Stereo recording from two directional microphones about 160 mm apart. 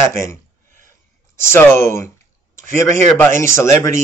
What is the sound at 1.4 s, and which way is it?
Speech, 15° left (ahead or behind).